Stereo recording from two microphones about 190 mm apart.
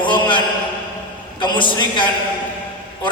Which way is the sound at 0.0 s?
25° left (ahead or behind).